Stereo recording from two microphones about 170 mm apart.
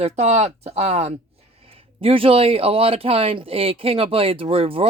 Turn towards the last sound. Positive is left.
turn(degrees=-35)  # may be behind; listen again after turning